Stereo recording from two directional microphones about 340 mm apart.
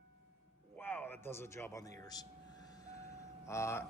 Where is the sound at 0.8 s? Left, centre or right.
Centre.